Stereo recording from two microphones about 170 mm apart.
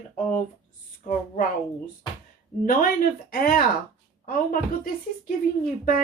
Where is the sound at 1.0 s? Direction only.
50° left (ahead or behind).